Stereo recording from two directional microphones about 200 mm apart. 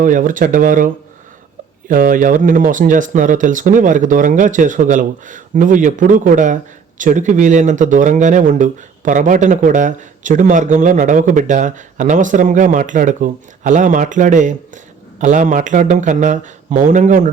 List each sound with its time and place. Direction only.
0.0 s speech: 40° right (ahead or behind)
1.9 s speech: 45° right (ahead or behind)